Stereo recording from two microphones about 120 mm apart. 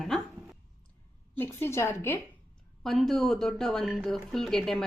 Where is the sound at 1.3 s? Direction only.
20° left (ahead or behind).